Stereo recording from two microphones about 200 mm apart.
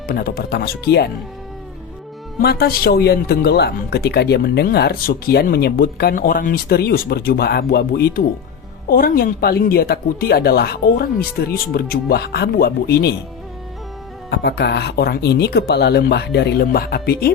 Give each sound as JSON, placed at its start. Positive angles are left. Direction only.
{"t": 0.1, "sound": "speech", "side_deg": 45}
{"t": 2.4, "sound": "speech", "side_deg": 50}
{"t": 14.3, "sound": "speech", "side_deg": 55}